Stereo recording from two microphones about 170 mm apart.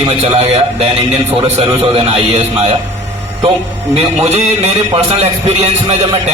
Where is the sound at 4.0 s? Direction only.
40° right (ahead or behind).